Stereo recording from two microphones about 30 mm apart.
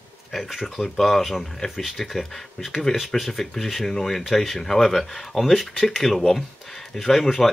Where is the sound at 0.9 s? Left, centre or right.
Centre.